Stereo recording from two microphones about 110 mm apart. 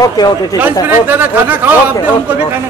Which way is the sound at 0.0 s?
35° left (ahead or behind).